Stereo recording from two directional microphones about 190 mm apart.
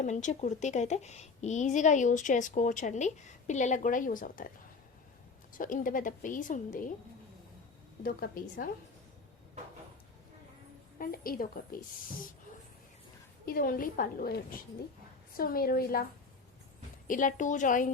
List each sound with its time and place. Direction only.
0.0 s a woman's voice: 40° left (ahead or behind)
5.5 s a woman's voice: 45° left (ahead or behind)
8.0 s a woman's voice: 50° left (ahead or behind)
10.9 s a woman's voice: 50° left (ahead or behind)
13.4 s a woman's voice: 50° left (ahead or behind)
17.1 s a woman's voice: 45° left (ahead or behind)